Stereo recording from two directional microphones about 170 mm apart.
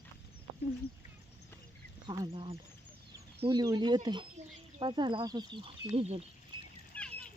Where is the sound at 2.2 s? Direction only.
35° right (ahead or behind).